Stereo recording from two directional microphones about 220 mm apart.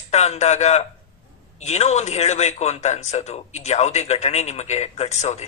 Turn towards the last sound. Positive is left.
turn(degrees=30)  # may be behind; listen again after turning